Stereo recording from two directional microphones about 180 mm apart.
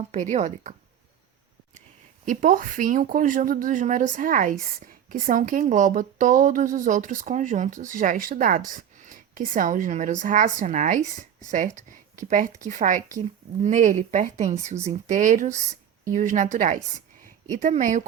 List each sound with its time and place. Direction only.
0.1 s a woman's voice: 40° right (ahead or behind)
2.2 s a woman's voice: 45° right (ahead or behind)